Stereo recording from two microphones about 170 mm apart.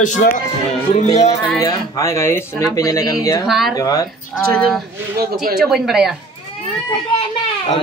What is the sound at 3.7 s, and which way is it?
Speech, 20° left (ahead or behind).